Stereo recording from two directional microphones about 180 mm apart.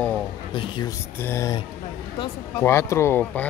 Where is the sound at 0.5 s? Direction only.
25° left (ahead or behind).